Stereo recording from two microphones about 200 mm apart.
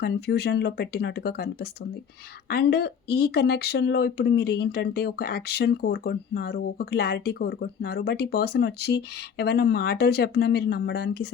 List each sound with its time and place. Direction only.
0.0 s speech: 55° left (ahead or behind)